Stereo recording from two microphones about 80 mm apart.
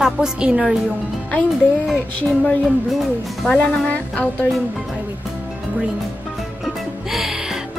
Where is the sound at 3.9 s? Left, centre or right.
Left.